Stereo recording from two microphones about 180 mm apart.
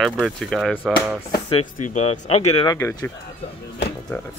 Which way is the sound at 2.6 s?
20° left (ahead or behind).